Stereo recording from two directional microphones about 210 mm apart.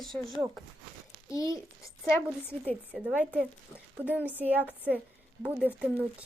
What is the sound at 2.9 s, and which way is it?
A woman's voice, 5° right (ahead or behind).